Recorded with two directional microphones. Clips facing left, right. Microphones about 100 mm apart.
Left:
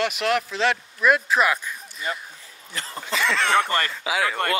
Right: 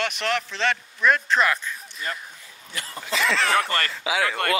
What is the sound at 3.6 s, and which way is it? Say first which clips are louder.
Speech: left 2 dB; 15° left (ahead or behind).